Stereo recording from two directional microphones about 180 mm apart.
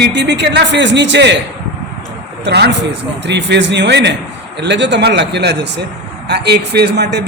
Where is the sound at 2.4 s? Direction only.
70° right (ahead or behind).